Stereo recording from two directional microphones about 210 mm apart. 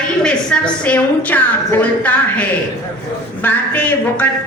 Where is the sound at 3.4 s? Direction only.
10° left (ahead or behind).